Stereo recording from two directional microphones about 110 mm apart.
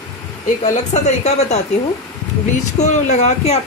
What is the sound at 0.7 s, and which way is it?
Speech, 90° left.